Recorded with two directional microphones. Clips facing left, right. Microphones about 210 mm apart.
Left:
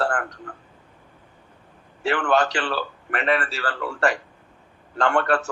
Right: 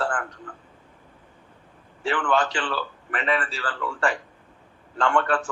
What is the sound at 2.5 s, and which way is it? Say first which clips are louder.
A man's voice: left 2 dB; 65° left (ahead or behind).